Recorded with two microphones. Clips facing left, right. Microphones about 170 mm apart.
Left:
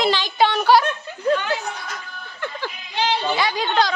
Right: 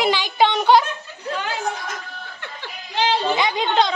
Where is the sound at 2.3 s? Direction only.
45° left (ahead or behind).